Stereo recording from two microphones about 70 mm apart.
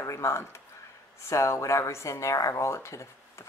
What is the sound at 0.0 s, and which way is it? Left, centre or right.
Speech, left.